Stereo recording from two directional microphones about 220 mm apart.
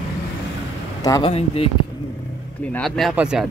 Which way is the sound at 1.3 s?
25° left (ahead or behind).